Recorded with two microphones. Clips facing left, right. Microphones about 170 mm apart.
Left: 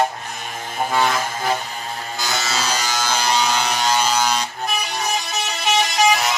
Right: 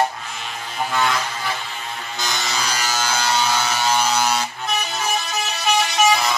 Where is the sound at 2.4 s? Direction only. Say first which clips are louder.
Left 2 dB; 15° right (ahead or behind).